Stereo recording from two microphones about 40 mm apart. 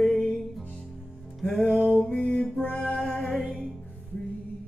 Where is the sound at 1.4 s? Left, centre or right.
Centre.